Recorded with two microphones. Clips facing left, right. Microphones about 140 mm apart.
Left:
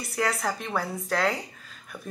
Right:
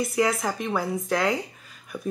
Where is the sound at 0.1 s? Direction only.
Centre (ahead or behind).